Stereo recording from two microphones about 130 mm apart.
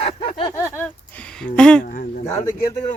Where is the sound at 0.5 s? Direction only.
20° left (ahead or behind).